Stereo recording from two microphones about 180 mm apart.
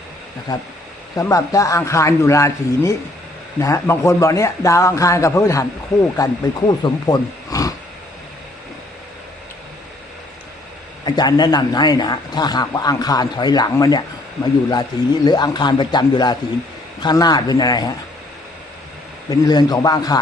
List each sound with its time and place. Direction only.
0.5 s a man's voice: 20° left (ahead or behind)
11.0 s a man's voice: 25° left (ahead or behind)
19.3 s a man's voice: 20° left (ahead or behind)